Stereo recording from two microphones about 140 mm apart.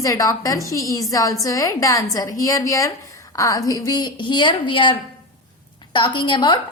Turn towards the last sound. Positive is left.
turn(degrees=35)  # may be behind; listen again after turning